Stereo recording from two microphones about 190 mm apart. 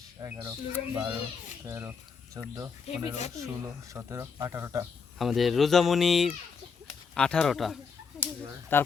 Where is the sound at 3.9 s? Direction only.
15° right (ahead or behind).